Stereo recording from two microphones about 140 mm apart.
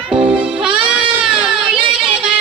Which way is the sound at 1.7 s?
40° right (ahead or behind).